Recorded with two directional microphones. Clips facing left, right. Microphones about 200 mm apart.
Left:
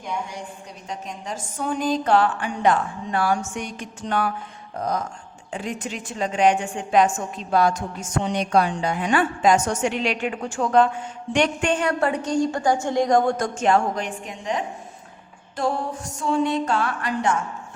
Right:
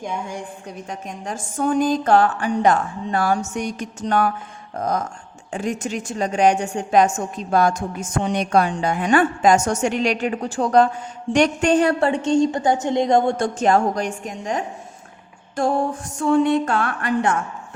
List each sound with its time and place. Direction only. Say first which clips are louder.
0.9 s a woman's voice: even; 50° right (ahead or behind)
16.2 s a woman's voice: right 5 dB; 55° right (ahead or behind)